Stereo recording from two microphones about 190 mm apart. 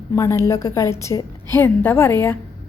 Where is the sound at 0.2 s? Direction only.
15° left (ahead or behind).